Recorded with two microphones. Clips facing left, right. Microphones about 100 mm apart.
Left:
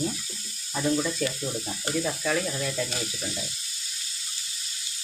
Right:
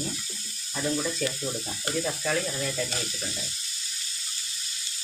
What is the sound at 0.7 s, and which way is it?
Sizzle, 5° left (ahead or behind).